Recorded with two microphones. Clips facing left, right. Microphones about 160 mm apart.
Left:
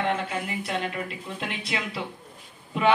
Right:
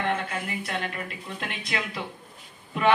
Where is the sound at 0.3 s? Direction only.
20° left (ahead or behind).